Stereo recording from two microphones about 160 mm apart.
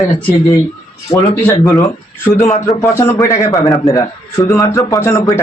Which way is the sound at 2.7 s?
15° left (ahead or behind).